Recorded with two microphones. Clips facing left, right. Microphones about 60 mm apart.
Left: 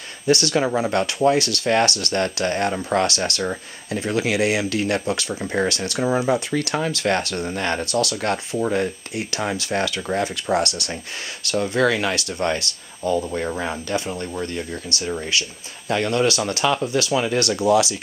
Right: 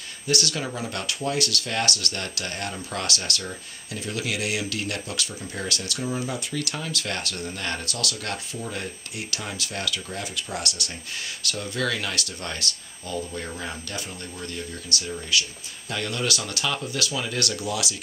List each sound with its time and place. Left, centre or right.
0.3 s speech: left